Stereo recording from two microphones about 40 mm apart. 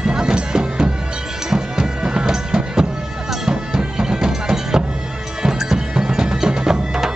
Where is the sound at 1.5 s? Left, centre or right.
Centre.